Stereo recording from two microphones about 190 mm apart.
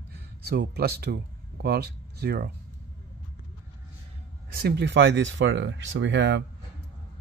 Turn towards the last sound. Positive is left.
turn(degrees=-70)  # may be behind; listen again after turning